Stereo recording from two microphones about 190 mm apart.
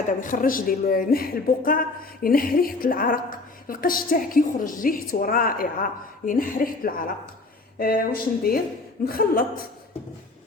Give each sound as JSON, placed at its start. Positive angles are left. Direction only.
{"t": 0.2, "sound": "a woman's voice", "side_deg": 45}